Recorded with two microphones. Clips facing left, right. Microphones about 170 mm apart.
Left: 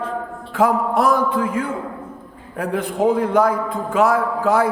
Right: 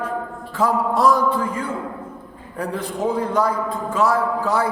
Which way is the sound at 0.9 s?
55° left (ahead or behind).